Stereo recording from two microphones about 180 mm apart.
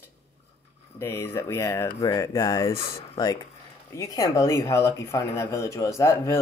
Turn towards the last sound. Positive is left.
turn(degrees=15)  # may be behind; listen again after turning